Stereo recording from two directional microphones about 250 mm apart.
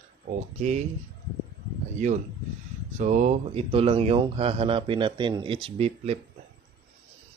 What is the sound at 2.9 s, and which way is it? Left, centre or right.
Speech, right.